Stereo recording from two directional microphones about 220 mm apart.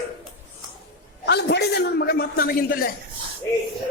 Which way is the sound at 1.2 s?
50° left (ahead or behind).